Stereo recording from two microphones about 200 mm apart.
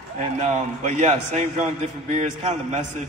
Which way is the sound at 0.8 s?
35° right (ahead or behind).